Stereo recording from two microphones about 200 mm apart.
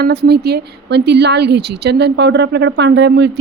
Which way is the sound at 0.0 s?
55° right (ahead or behind).